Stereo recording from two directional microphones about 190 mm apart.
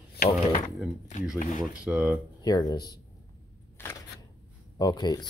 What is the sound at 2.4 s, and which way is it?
Speech, 20° left (ahead or behind).